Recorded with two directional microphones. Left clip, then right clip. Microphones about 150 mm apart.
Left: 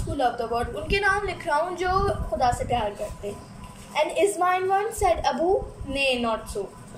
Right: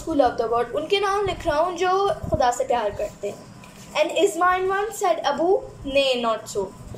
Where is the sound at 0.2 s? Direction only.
25° right (ahead or behind).